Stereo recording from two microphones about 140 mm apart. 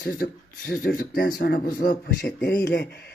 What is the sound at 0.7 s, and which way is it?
A man's voice, 90° left.